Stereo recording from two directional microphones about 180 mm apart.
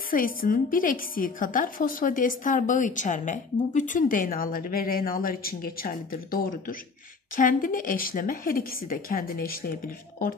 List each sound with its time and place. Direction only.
0.1 s a woman's voice: 50° left (ahead or behind)